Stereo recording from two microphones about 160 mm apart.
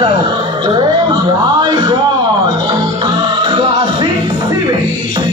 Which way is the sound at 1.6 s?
25° right (ahead or behind).